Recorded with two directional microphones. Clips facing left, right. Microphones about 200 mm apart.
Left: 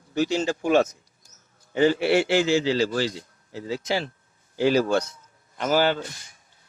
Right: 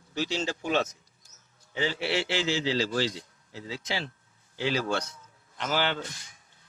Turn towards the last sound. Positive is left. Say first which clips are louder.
# left 7 dB
turn(degrees=40)  # may be behind; listen again after turning